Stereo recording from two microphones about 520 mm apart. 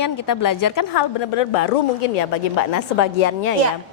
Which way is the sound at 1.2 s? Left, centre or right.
Left.